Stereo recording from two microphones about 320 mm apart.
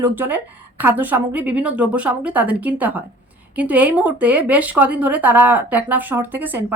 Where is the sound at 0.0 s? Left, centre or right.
Centre.